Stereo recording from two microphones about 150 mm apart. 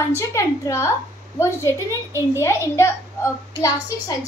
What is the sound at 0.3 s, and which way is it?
A child's voice, 20° left (ahead or behind).